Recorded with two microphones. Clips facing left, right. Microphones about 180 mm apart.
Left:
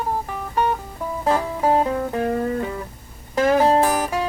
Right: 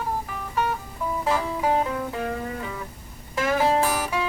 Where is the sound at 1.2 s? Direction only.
40° left (ahead or behind).